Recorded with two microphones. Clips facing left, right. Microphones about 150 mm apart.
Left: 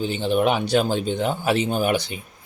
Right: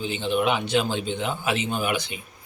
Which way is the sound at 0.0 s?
40° left (ahead or behind).